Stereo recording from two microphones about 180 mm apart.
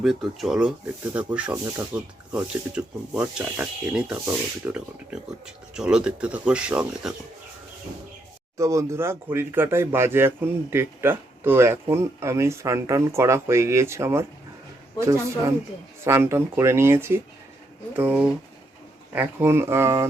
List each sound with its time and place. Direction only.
0.0 s speech: centre (ahead or behind)
8.5 s speech: 15° right (ahead or behind)